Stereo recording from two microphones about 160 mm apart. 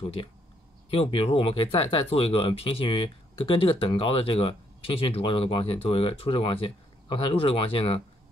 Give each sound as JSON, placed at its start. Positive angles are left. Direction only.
{"t": 0.0, "sound": "speech", "side_deg": 35}